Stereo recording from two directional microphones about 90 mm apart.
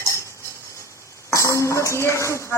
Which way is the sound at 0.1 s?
30° left (ahead or behind).